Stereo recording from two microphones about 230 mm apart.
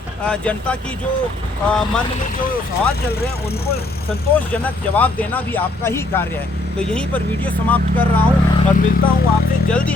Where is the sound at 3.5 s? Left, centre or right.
Left.